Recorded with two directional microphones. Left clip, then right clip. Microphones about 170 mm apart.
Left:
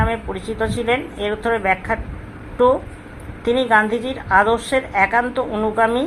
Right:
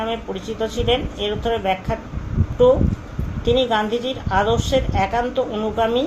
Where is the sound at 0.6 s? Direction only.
25° left (ahead or behind).